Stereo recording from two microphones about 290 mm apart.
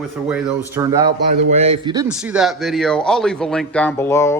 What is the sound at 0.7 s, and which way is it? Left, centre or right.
Speech, centre.